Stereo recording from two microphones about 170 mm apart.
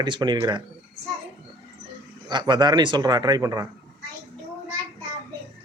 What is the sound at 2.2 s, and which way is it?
Speech, 25° right (ahead or behind).